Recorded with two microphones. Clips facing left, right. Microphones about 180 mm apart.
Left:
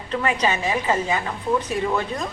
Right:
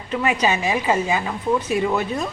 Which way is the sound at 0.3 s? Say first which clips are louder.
Right 2 dB; 10° right (ahead or behind).